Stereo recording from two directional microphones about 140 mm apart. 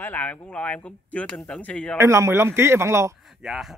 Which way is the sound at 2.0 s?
20° right (ahead or behind).